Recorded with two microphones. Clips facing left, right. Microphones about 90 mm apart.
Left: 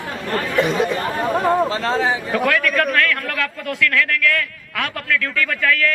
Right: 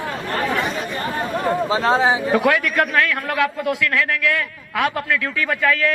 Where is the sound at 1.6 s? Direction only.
15° right (ahead or behind).